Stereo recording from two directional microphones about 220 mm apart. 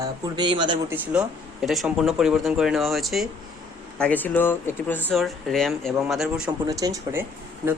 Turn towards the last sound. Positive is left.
turn(degrees=-10)  # may be behind; listen again after turning